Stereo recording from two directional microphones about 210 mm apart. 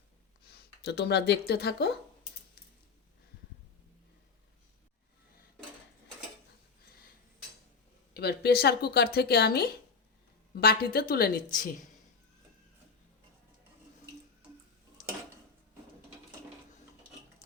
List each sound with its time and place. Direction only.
0.4 s speech: 50° left (ahead or behind)
8.1 s a woman's voice: 50° left (ahead or behind)